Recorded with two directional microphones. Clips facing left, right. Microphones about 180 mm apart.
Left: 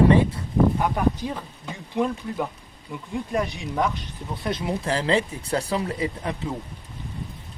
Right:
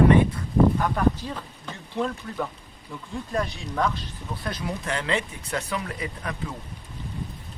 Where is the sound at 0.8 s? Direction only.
15° left (ahead or behind).